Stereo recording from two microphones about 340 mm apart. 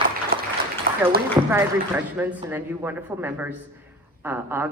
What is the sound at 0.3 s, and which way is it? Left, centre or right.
Applause, right.